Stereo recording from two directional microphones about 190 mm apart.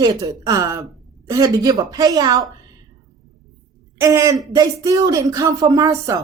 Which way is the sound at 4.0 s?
20° right (ahead or behind).